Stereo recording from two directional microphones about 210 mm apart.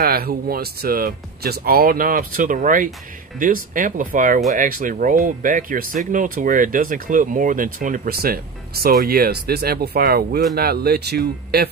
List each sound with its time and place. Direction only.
0.0 s speech: 45° right (ahead or behind)